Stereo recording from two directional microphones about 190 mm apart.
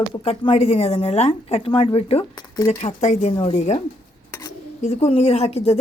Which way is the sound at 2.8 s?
40° left (ahead or behind).